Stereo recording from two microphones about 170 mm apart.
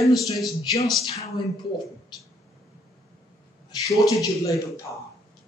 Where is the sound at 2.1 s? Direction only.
25° left (ahead or behind).